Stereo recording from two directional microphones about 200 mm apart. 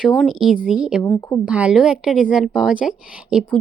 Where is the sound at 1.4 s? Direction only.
5° right (ahead or behind).